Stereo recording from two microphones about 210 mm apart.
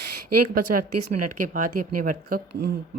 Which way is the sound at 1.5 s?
40° right (ahead or behind).